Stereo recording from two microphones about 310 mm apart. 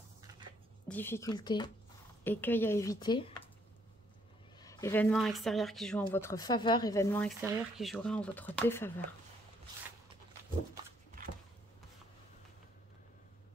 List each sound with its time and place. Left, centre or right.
0.8 s speech: centre
4.6 s speech: centre
11.2 s a sound: right